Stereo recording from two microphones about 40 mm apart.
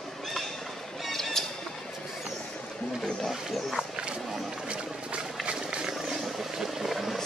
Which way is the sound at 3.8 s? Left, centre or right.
Right.